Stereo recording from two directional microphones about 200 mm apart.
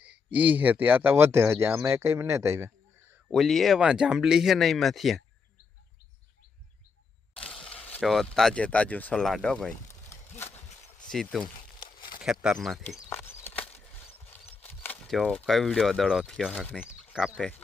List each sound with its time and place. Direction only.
0.0 s speech: 5° right (ahead or behind)
3.2 s speech: centre (ahead or behind)
7.3 s speech: 5° left (ahead or behind)
10.1 s a sound: 10° left (ahead or behind)
11.1 s speech: centre (ahead or behind)
11.8 s crumpling: 25° left (ahead or behind)
12.2 s speech: 5° right (ahead or behind)
13.1 s a sound: 10° left (ahead or behind)
14.6 s speech: 5° left (ahead or behind)